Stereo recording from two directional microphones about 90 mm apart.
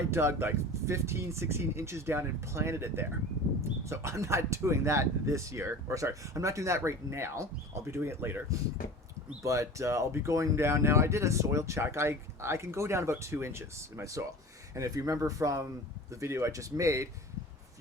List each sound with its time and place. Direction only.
0.1 s speech: 25° right (ahead or behind)
9.4 s speech: 35° right (ahead or behind)